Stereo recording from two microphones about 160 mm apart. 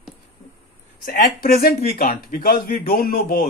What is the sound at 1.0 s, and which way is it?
Speech, 70° left (ahead or behind).